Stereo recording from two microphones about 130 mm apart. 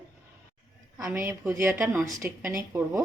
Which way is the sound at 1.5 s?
20° right (ahead or behind).